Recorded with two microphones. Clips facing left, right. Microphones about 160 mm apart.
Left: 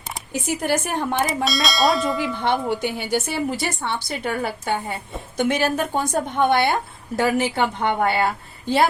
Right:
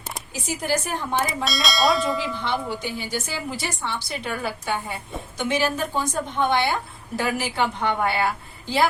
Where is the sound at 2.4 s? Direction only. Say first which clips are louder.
Left 5 dB; 60° left (ahead or behind).